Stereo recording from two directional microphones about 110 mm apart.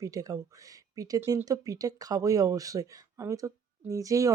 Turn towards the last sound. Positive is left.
turn(degrees=-30)  # may be behind; listen again after turning